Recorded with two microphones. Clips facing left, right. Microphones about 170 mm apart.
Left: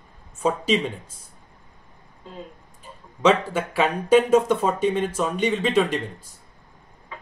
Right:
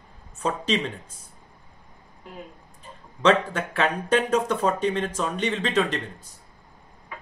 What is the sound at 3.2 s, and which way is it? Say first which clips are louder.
Speech: left 1 dB; 10° left (ahead or behind).